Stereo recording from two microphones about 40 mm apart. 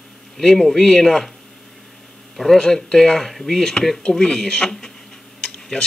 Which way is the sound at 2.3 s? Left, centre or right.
Centre.